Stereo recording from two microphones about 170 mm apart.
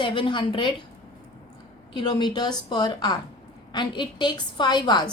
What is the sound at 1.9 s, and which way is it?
A woman's voice, 25° left (ahead or behind).